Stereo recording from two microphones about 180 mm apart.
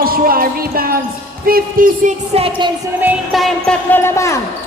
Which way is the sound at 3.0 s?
5° right (ahead or behind).